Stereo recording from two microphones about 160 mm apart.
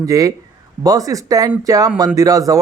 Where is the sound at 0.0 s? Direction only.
20° right (ahead or behind).